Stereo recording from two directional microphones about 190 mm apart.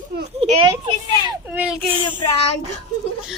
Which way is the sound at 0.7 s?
20° right (ahead or behind).